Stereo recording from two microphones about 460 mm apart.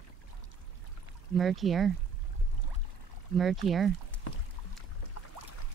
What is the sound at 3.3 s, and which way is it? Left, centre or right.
Speech, centre.